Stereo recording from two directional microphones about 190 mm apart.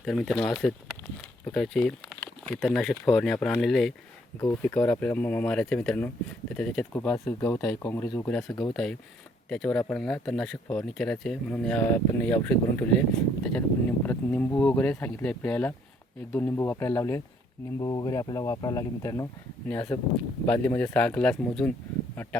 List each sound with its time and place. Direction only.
0.0 s speech: centre (ahead or behind)
8.7 s speech: 5° left (ahead or behind)